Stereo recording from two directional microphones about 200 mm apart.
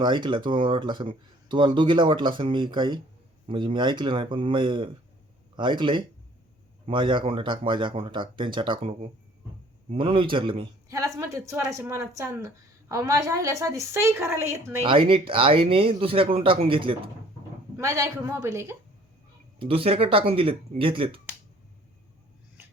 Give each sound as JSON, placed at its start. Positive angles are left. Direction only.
{"t": 0.0, "sound": "speech", "side_deg": -25}
{"t": 14.8, "sound": "speech", "side_deg": -25}
{"t": 17.7, "sound": "speech", "side_deg": -15}
{"t": 19.5, "sound": "speech", "side_deg": -25}